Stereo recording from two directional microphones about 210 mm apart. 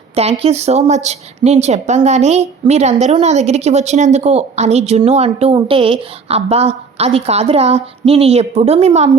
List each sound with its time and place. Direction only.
0.2 s a woman's voice: 30° right (ahead or behind)